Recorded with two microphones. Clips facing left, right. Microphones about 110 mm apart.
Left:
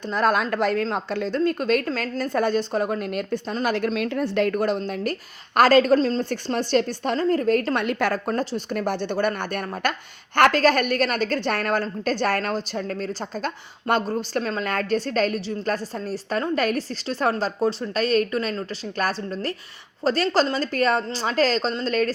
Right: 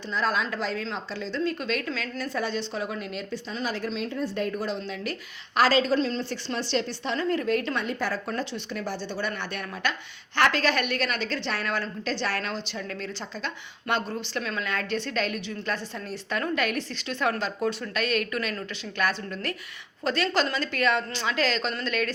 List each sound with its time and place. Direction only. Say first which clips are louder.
0.1 s a woman's voice: left 6 dB; 55° left (ahead or behind)
7.8 s a woman's voice: left 6 dB; 70° left (ahead or behind)
8.3 s a woman's voice: left 6 dB; 45° left (ahead or behind)